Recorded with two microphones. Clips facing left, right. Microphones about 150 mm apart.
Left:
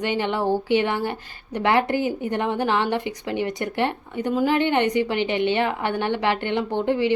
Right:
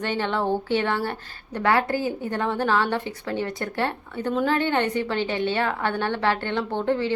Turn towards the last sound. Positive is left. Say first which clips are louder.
# left 2 dB
turn(degrees=15)  # may be behind; listen again after turning